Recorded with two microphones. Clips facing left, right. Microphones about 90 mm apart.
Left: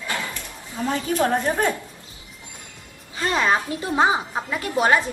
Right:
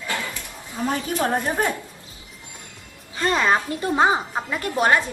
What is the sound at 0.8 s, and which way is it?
Speech, 20° right (ahead or behind).